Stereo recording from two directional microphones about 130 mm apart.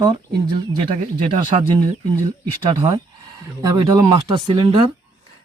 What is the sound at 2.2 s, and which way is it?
Speech, 40° right (ahead or behind).